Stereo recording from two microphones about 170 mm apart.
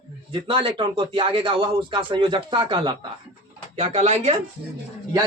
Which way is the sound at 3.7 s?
40° right (ahead or behind).